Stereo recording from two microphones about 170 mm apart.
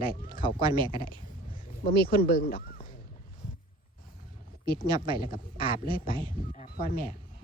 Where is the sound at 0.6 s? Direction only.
25° right (ahead or behind).